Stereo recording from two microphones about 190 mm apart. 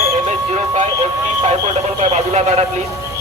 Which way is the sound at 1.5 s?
35° right (ahead or behind).